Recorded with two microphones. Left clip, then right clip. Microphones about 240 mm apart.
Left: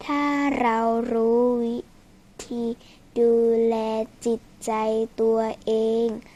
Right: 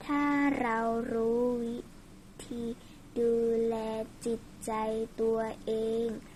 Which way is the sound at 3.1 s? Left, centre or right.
Left.